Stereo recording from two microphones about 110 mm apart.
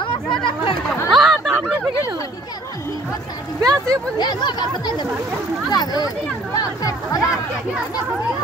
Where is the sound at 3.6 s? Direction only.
35° right (ahead or behind).